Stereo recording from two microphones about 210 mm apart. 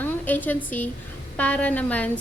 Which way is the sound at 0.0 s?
10° left (ahead or behind).